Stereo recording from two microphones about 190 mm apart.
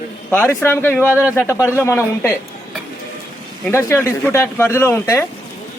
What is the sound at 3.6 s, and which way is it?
Speech, 15° left (ahead or behind).